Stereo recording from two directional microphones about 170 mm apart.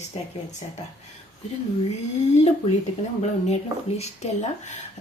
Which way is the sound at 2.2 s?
40° left (ahead or behind).